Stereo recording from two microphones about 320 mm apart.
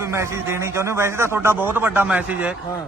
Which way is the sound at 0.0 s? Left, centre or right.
Centre.